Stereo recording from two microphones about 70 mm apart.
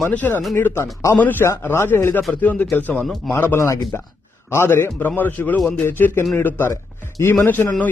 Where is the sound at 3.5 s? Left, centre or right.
Left.